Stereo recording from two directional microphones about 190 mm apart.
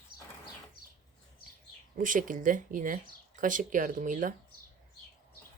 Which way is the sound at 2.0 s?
45° right (ahead or behind).